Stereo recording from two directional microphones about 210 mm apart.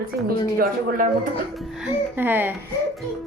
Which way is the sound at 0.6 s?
40° right (ahead or behind).